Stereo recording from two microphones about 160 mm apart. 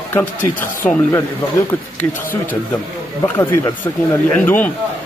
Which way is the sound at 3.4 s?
20° left (ahead or behind).